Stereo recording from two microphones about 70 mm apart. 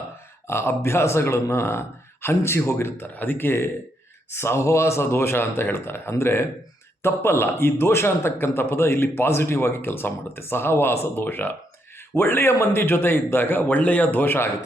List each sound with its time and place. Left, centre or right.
0.4 s speech: left